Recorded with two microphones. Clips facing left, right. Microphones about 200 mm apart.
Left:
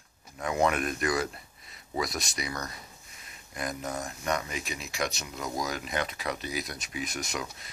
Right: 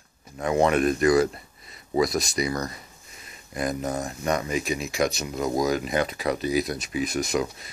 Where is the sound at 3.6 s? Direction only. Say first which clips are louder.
Right 7 dB; 35° right (ahead or behind).